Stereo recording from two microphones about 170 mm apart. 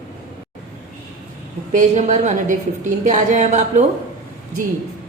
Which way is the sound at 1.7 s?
40° right (ahead or behind).